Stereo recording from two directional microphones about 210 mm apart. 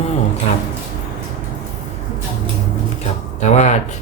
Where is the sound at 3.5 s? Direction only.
35° left (ahead or behind).